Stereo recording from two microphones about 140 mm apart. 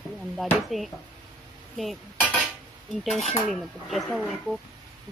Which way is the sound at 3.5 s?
Centre (ahead or behind).